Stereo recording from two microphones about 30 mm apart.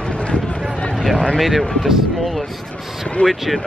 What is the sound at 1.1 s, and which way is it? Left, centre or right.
Speech, left.